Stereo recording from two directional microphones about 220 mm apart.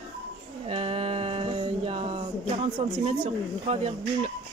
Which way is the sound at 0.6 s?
25° right (ahead or behind).